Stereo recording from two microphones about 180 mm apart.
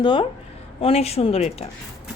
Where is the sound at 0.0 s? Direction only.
30° left (ahead or behind).